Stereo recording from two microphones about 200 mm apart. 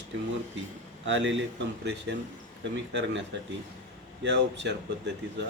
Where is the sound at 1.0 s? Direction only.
65° right (ahead or behind).